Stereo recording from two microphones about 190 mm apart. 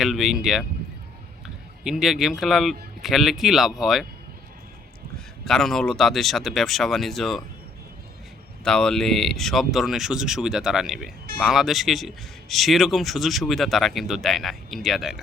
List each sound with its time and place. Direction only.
0.0 s speech: centre (ahead or behind)
1.8 s speech: centre (ahead or behind)
5.5 s speech: centre (ahead or behind)
8.6 s speech: 5° left (ahead or behind)